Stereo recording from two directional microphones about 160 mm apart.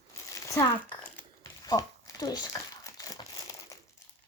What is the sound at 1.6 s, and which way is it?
Crumpling, 25° left (ahead or behind).